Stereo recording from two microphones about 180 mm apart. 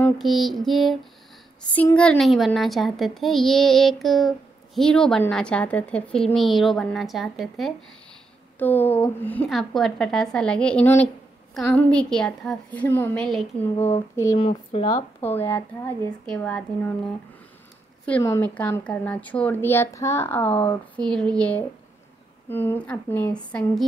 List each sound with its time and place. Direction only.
0.0 s a woman's voice: centre (ahead or behind)
8.5 s a woman's voice: 10° left (ahead or behind)
14.5 s speech: 40° left (ahead or behind)
15.2 s a woman's voice: 10° left (ahead or behind)
18.2 s a woman's voice: 10° left (ahead or behind)